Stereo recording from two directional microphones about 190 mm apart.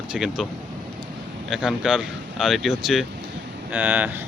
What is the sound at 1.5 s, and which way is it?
Speech, centre (ahead or behind).